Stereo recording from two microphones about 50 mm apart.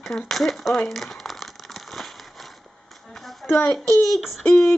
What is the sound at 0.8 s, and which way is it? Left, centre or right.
Crumpling, centre.